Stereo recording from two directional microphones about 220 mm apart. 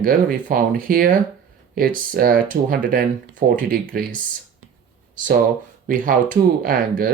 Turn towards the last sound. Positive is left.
turn(degrees=-40)  # may be behind; listen again after turning